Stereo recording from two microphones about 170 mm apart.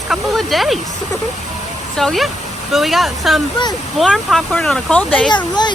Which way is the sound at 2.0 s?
Centre (ahead or behind).